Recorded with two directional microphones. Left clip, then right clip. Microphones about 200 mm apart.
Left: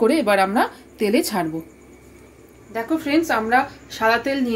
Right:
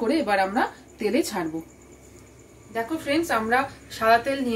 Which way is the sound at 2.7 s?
50° left (ahead or behind).